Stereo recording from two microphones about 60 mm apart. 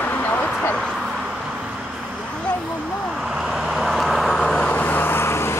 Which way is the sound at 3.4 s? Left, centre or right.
Centre.